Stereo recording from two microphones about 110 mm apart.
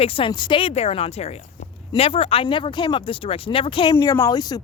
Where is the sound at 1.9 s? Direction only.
60° left (ahead or behind).